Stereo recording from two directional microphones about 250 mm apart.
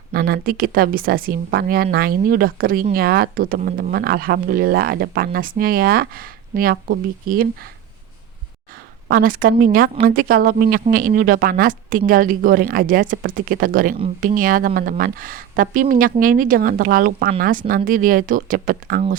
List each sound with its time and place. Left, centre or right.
0.1 s speech: right
9.0 s speech: right